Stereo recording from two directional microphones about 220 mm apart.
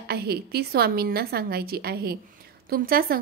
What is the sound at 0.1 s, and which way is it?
A woman's voice, 45° right (ahead or behind).